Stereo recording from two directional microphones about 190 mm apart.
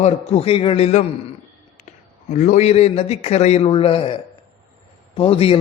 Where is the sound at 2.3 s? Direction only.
40° left (ahead or behind).